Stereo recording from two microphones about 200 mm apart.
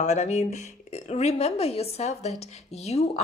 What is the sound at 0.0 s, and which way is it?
Speech, 35° left (ahead or behind).